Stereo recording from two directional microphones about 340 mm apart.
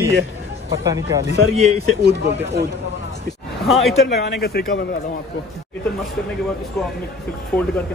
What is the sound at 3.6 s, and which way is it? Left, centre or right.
Speech, centre.